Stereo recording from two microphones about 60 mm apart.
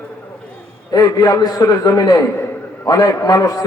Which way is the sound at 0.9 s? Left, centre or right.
Left.